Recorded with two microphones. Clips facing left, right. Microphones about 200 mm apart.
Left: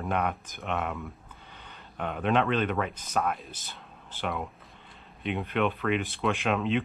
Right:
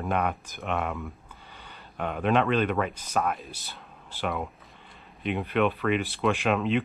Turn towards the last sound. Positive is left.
turn(degrees=-5)  # may be behind; listen again after turning